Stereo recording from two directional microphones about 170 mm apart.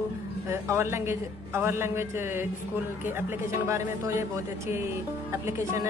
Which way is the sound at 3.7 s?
15° right (ahead or behind).